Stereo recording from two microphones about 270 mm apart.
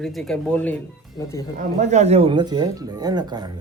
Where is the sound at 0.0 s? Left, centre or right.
Centre.